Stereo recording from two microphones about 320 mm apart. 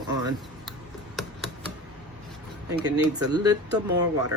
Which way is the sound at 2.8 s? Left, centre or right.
Centre.